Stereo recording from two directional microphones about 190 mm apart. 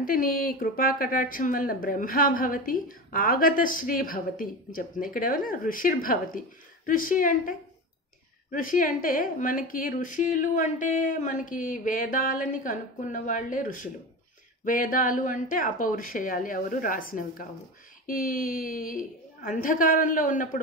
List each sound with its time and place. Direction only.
0.0 s a woman's voice: 50° left (ahead or behind)